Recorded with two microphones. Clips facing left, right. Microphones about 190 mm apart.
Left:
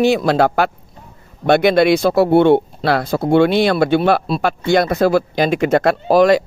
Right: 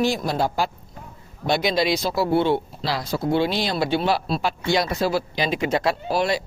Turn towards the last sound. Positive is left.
turn(degrees=50)  # may be behind; listen again after turning